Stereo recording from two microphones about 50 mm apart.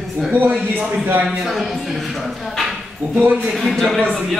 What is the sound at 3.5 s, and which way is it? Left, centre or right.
Speech, centre.